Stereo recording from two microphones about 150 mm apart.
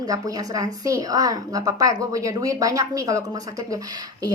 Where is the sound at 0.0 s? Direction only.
25° right (ahead or behind).